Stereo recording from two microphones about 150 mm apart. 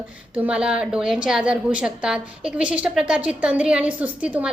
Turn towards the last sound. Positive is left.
turn(degrees=-10)  # may be behind; listen again after turning